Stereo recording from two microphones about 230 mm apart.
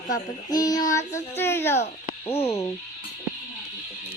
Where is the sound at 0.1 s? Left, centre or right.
Centre.